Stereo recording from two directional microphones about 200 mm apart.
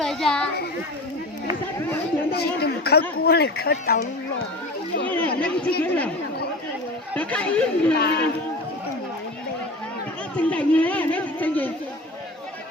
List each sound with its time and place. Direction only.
0.0 s children playing: centre (ahead or behind)
2.3 s a sound: 55° left (ahead or behind)
3.2 s speech: 50° left (ahead or behind)
5.0 s speech: 5° left (ahead or behind)
7.1 s speech: 5° left (ahead or behind)
7.9 s speech: 55° left (ahead or behind)
10.3 s speech: 5° left (ahead or behind)